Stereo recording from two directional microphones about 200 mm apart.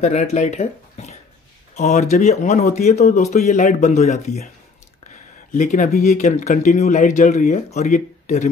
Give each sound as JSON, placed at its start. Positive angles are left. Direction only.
{"t": 0.0, "sound": "speech", "side_deg": 35}
{"t": 5.5, "sound": "speech", "side_deg": 40}